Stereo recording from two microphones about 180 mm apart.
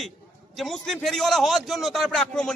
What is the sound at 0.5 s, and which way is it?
A man's voice, centre (ahead or behind).